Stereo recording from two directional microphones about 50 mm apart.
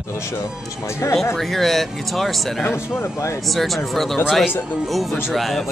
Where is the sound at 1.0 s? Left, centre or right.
Left.